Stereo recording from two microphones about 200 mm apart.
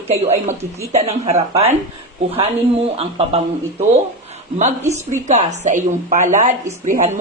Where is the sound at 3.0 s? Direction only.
30° right (ahead or behind).